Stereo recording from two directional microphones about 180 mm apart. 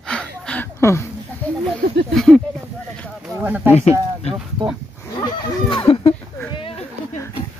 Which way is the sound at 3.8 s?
35° left (ahead or behind).